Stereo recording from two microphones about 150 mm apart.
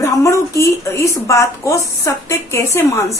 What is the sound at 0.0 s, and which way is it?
A woman's voice, 20° left (ahead or behind).